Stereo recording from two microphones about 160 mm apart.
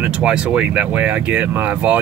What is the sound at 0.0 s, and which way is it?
Speech, 5° right (ahead or behind).